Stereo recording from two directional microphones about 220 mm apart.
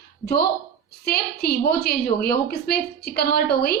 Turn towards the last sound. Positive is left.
turn(degrees=45)  # may be behind; listen again after turning